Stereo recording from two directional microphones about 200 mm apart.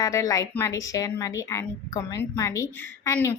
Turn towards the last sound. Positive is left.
turn(degrees=15)  # may be behind; listen again after turning